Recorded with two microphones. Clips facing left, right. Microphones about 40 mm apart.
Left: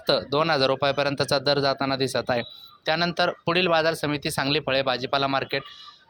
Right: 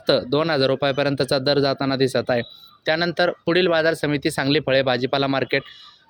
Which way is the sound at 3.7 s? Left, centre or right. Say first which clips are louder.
Right 3 dB; right.